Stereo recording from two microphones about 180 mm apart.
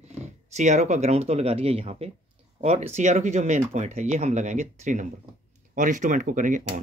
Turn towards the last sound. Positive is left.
turn(degrees=-45)  # may be behind; listen again after turning